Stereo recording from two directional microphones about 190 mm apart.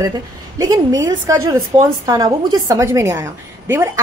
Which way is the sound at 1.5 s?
15° right (ahead or behind).